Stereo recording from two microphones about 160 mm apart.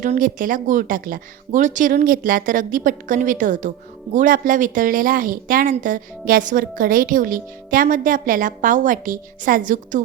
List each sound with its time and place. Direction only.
0.0 s a woman's voice: 55° right (ahead or behind)